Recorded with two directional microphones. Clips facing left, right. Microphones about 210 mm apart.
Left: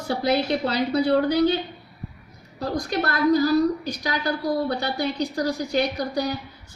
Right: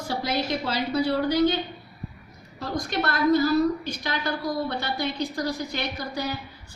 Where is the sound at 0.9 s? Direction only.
40° left (ahead or behind).